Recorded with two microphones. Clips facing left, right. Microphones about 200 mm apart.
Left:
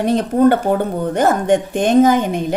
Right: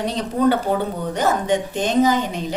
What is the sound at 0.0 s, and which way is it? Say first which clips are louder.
A woman's voice: left 6 dB; 55° left (ahead or behind).